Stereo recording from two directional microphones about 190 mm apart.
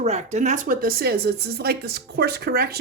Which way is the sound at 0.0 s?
35° right (ahead or behind).